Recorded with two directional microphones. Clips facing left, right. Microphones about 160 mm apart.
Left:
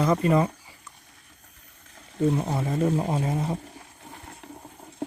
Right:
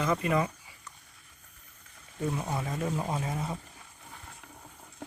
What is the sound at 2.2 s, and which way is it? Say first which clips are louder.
Speech: left 8 dB; 30° left (ahead or behind).